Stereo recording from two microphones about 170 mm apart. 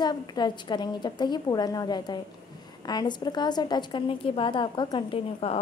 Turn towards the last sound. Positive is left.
turn(degrees=35)  # may be behind; listen again after turning